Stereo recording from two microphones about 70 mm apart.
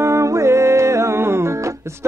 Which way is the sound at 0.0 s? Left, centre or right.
Right.